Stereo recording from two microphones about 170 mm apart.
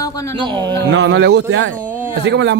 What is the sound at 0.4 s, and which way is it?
Speech, 25° right (ahead or behind).